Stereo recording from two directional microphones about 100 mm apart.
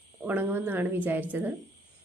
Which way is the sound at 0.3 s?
20° right (ahead or behind).